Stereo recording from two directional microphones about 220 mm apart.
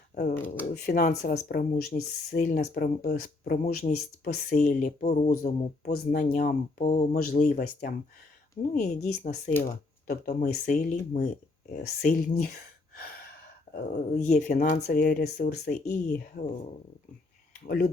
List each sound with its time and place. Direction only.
0.1 s speech: 35° left (ahead or behind)
13.7 s speech: 35° left (ahead or behind)